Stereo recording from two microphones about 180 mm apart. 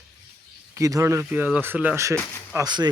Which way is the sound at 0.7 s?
15° right (ahead or behind).